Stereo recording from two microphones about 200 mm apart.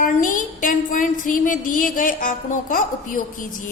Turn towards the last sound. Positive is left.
turn(degrees=40)  # may be behind; listen again after turning